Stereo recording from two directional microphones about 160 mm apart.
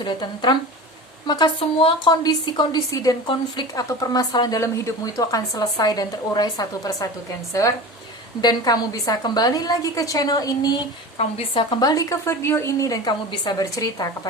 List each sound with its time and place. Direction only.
0.0 s a woman's voice: 30° left (ahead or behind)
8.4 s a woman's voice: 25° left (ahead or behind)
11.2 s speech: 40° left (ahead or behind)
11.7 s a woman's voice: 25° left (ahead or behind)